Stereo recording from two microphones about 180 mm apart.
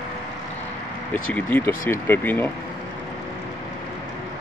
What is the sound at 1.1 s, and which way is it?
Speech, 10° left (ahead or behind).